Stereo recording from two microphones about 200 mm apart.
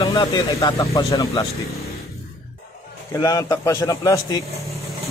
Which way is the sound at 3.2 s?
15° left (ahead or behind).